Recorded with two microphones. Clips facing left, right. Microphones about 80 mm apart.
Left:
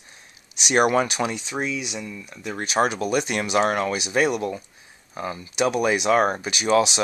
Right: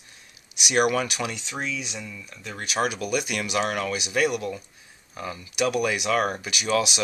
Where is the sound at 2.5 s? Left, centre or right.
Left.